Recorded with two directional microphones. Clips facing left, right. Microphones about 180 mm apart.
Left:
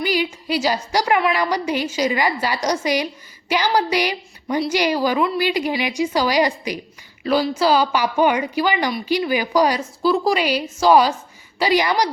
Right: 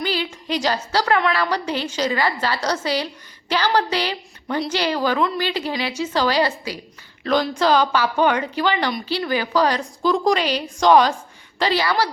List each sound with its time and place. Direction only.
0.0 s a woman's voice: 10° left (ahead or behind)